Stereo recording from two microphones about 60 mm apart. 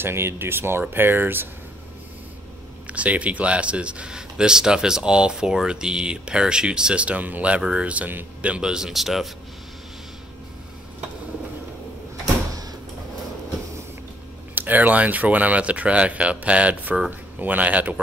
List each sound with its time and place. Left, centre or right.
0.0 s speech: right
2.9 s speech: right; by 9.3 s centre
14.5 s speech: right